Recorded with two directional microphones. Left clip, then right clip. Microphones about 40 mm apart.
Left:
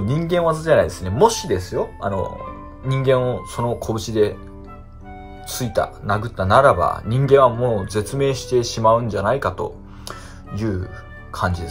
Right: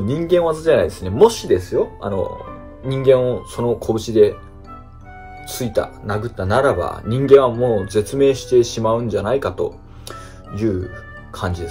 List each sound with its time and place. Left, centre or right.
0.0 s speech: centre
0.7 s speech: centre
2.9 s speech: centre
5.5 s speech: centre
6.0 s speech: left
7.1 s speech: centre; by 9.2 s left
9.2 s speech: centre